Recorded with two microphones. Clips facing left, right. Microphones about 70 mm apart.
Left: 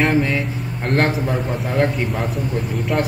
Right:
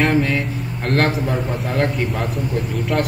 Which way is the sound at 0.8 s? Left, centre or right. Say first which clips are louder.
Even; centre.